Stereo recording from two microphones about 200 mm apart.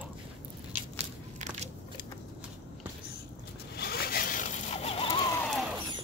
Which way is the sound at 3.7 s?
50° left (ahead or behind).